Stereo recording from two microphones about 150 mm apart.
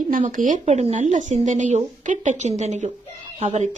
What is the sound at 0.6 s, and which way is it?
Speech, 45° right (ahead or behind).